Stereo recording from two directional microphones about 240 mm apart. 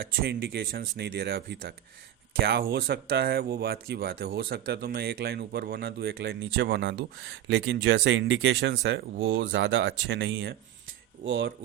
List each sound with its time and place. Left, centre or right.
0.0 s speech: right